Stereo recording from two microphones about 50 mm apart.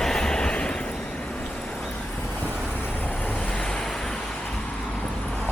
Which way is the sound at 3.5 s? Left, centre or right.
Centre.